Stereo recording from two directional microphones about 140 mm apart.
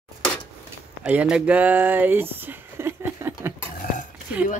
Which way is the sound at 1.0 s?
10° right (ahead or behind).